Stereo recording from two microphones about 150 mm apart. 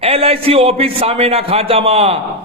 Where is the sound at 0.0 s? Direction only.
40° right (ahead or behind).